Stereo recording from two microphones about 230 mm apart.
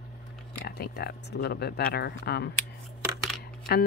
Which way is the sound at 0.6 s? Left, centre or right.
Left.